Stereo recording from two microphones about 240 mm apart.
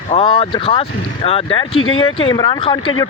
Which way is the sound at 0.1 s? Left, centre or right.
Left.